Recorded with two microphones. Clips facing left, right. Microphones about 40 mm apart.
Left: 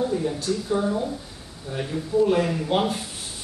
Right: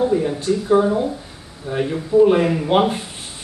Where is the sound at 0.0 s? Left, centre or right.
Right.